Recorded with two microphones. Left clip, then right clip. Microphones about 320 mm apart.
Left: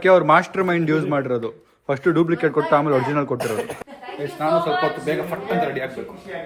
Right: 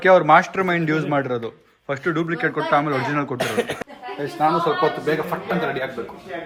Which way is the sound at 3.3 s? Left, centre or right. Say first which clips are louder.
Right 1 dB; right.